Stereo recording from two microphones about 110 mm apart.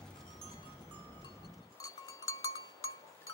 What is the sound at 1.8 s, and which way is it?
Cowbell, 30° left (ahead or behind).